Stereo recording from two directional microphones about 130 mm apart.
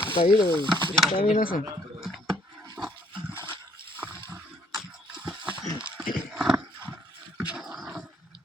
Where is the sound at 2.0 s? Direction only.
Centre (ahead or behind).